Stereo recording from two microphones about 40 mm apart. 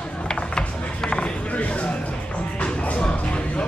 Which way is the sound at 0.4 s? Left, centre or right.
Left.